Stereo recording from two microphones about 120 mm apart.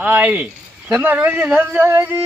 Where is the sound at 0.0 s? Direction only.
10° right (ahead or behind).